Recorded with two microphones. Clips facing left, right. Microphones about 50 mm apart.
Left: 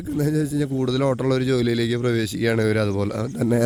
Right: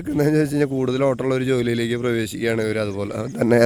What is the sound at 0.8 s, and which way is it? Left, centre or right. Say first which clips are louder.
Speech: right 2 dB; right.